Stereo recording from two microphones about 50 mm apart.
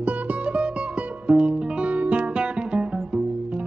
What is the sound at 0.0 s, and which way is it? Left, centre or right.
Music, right.